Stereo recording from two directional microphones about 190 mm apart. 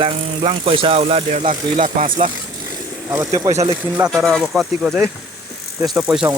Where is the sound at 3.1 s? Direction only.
20° right (ahead or behind).